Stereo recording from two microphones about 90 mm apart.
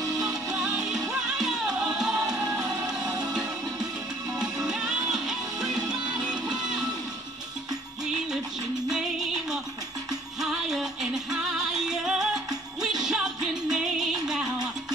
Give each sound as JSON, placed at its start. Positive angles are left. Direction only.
{"t": 0.5, "sound": "music", "side_deg": -10}
{"t": 3.0, "sound": "music", "side_deg": -50}
{"t": 4.4, "sound": "music", "side_deg": -5}
{"t": 10.4, "sound": "music", "side_deg": -5}